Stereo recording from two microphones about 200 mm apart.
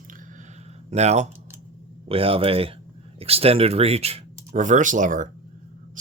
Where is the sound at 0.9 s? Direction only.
35° right (ahead or behind).